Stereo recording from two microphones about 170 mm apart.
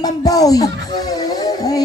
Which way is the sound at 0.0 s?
20° left (ahead or behind).